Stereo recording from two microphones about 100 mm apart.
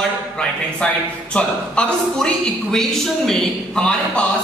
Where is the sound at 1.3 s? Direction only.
10° left (ahead or behind).